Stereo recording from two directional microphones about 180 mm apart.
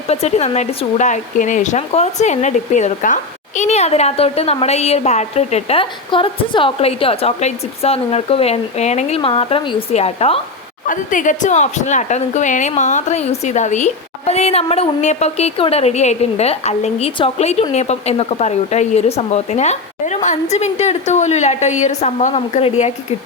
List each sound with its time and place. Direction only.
0.1 s speech: 35° left (ahead or behind)
10.8 s speech: 45° left (ahead or behind)